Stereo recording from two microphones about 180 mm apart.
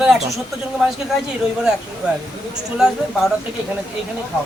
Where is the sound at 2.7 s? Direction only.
Centre (ahead or behind).